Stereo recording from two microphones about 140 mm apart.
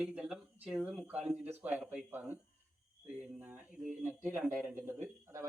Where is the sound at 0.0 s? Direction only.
5° right (ahead or behind).